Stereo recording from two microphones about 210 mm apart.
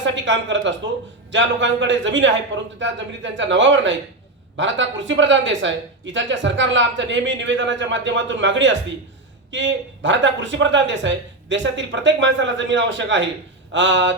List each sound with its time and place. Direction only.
0.0 s speech: 60° right (ahead or behind)